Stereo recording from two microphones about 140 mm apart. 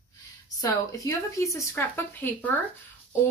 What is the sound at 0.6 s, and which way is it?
Speech, 25° left (ahead or behind).